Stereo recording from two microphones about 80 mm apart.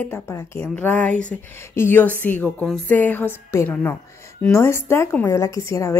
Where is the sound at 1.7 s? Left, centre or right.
Left.